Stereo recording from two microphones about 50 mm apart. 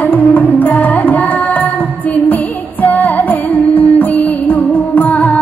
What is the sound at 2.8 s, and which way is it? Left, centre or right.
Music, left.